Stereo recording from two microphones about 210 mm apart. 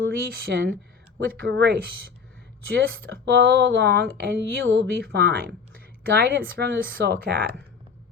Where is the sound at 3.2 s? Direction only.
55° right (ahead or behind).